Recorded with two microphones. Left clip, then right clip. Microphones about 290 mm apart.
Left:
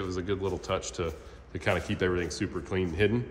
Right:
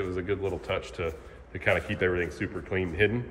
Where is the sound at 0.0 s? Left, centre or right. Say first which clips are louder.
Right 2 dB; centre.